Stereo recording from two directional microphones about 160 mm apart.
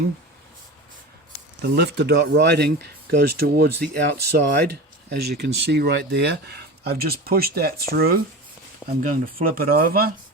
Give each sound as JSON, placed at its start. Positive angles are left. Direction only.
{"t": 1.6, "sound": "speech", "side_deg": -90}
{"t": 9.0, "sound": "speech", "side_deg": -55}